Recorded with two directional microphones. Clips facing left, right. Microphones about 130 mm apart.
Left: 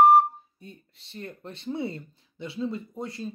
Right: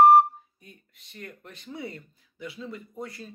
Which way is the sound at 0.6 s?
30° left (ahead or behind).